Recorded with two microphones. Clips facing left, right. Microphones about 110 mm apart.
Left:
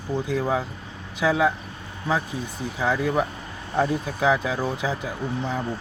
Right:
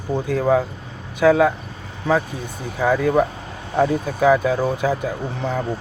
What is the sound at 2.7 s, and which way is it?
Speech, 50° right (ahead or behind).